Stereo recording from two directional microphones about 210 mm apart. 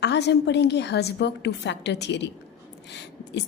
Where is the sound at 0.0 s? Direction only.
55° left (ahead or behind).